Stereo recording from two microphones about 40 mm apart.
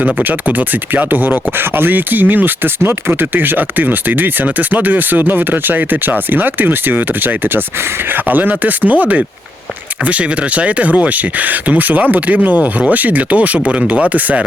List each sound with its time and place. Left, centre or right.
0.0 s speech: right
2.8 s speech: right